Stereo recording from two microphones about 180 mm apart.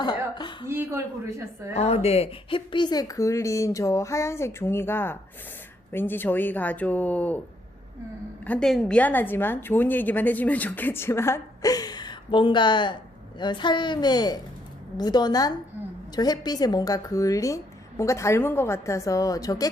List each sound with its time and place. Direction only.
0.0 s throat clearing: 25° left (ahead or behind)
0.7 s a woman's voice: 15° right (ahead or behind)
1.7 s a woman's voice: 35° left (ahead or behind); by 7.4 s 10° left (ahead or behind)
8.4 s a woman's voice: 5° left (ahead or behind); by 19.6 s 20° left (ahead or behind)